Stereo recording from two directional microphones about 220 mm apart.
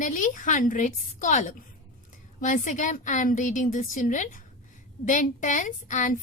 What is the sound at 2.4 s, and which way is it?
A woman's voice, 35° left (ahead or behind).